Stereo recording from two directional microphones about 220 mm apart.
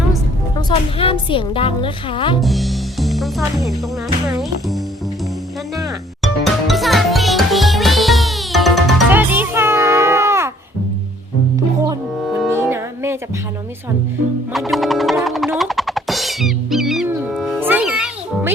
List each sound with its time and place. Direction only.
0.5 s a woman's voice: 25° left (ahead or behind)
2.4 s music: centre (ahead or behind)
5.7 s music: centre (ahead or behind)
12.3 s music: 10° right (ahead or behind)
14.5 s music: centre (ahead or behind)